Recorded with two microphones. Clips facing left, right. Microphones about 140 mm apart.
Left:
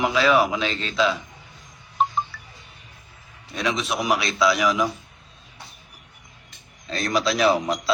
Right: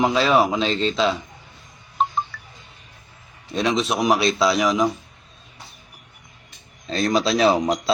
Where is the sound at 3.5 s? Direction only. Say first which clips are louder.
Right 4 dB; 25° right (ahead or behind).